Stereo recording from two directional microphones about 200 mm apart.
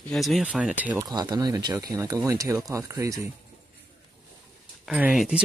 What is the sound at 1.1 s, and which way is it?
Speech, 20° right (ahead or behind).